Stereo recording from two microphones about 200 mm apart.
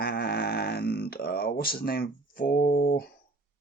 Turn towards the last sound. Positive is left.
turn(degrees=45)  # may be behind; listen again after turning